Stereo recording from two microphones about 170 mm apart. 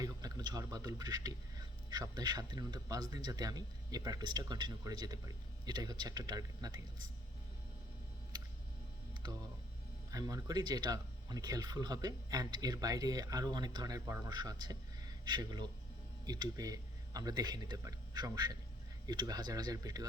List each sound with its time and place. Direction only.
0.0 s speech: 20° right (ahead or behind)
10.1 s speech: 20° right (ahead or behind)